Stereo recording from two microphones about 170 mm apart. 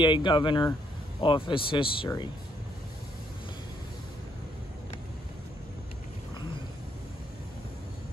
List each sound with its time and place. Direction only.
0.0 s speech: 30° left (ahead or behind)